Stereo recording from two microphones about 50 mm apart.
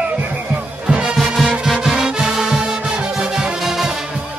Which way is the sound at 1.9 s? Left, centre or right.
Centre.